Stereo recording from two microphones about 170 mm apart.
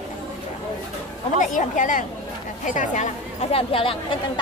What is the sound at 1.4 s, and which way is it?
Speech, 50° left (ahead or behind).